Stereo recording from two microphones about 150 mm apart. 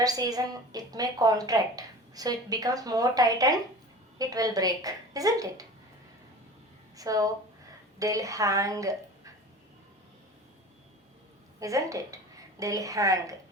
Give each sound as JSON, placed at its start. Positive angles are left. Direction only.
{"t": 0.0, "sound": "a woman's voice", "side_deg": -25}
{"t": 6.9, "sound": "a woman's voice", "side_deg": -25}
{"t": 11.6, "sound": "a woman's voice", "side_deg": -20}